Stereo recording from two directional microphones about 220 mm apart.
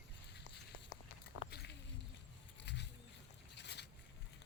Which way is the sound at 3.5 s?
50° left (ahead or behind).